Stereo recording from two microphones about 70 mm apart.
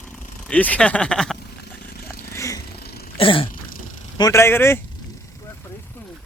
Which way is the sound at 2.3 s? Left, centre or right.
Left.